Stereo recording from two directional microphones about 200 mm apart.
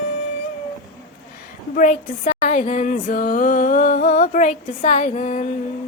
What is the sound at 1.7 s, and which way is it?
Music, 40° left (ahead or behind).